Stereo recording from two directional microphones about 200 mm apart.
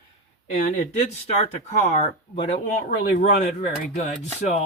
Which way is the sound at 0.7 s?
35° left (ahead or behind).